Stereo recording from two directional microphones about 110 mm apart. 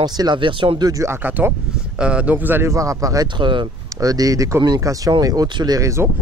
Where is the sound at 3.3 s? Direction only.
45° right (ahead or behind).